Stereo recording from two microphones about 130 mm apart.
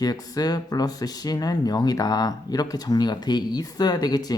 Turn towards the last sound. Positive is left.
turn(degrees=30)  # may be behind; listen again after turning